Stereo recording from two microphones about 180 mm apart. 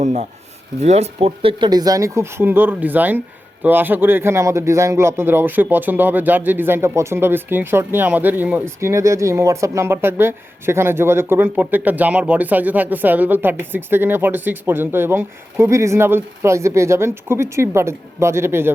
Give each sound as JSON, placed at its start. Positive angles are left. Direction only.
{"t": 0.0, "sound": "a man's voice", "side_deg": -40}